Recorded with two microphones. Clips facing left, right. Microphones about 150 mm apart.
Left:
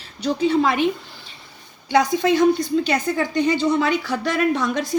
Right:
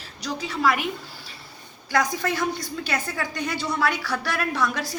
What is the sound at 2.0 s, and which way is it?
A woman's voice, 20° left (ahead or behind).